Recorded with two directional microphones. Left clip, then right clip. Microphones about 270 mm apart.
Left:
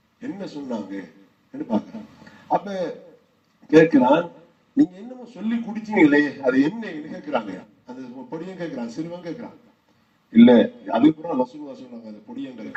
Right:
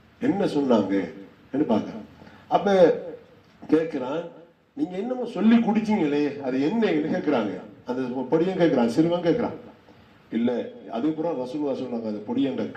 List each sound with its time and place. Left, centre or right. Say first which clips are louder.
0.2 s a man's voice: right 10 dB; centre
2.5 s a man's voice: right 6 dB; centre